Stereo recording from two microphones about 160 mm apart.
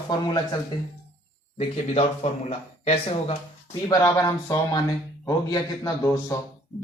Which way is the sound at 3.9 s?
25° left (ahead or behind).